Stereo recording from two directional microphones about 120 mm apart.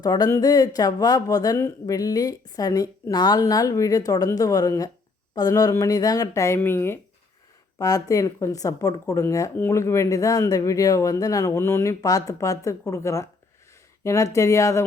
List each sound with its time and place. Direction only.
0.0 s speech: 35° left (ahead or behind)
7.8 s speech: 30° left (ahead or behind)